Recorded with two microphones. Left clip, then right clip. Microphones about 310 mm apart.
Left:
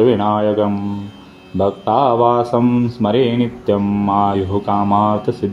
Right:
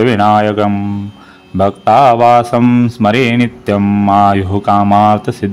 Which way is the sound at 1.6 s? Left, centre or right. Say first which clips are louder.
Right 7 dB; right.